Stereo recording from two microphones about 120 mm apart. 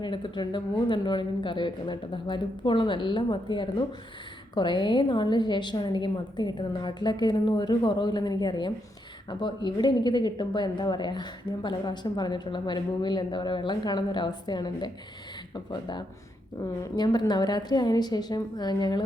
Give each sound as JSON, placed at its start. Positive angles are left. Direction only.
{"t": 0.0, "sound": "a woman's voice", "side_deg": 40}